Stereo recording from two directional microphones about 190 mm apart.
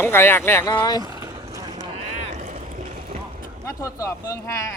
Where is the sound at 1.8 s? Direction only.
35° right (ahead or behind).